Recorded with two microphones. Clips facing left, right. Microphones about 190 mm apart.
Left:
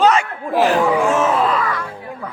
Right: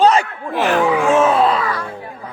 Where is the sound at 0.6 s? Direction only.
35° left (ahead or behind).